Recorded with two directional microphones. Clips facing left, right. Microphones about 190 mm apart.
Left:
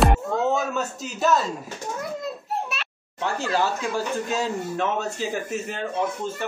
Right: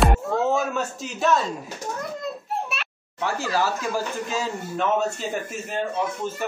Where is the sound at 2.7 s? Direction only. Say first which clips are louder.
Right 1 dB; centre (ahead or behind).